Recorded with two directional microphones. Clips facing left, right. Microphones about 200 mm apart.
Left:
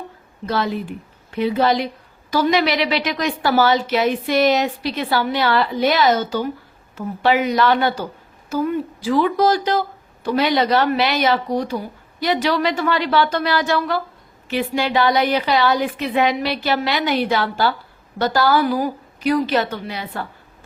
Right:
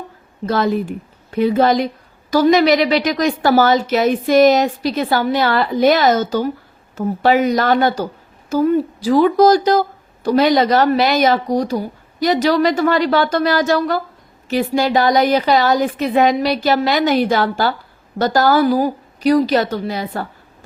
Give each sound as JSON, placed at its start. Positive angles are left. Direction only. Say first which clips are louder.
{"t": 0.4, "sound": "a woman's voice", "louder": "right 5 dB", "side_deg": -45}